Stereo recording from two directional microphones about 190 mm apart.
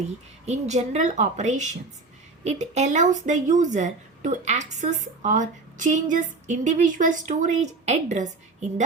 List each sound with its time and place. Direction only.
0.4 s speech: 35° right (ahead or behind)